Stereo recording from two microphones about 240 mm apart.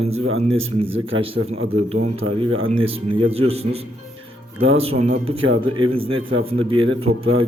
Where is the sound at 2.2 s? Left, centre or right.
Right.